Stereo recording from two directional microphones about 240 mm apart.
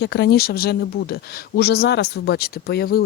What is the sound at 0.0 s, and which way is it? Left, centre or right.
Speech, left.